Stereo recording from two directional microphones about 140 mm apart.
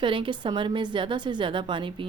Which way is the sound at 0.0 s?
35° right (ahead or behind).